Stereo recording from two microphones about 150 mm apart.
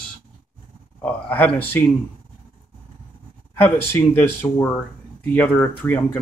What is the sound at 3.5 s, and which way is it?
Speech, 10° left (ahead or behind).